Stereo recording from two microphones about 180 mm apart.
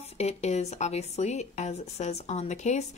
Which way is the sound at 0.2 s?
35° left (ahead or behind).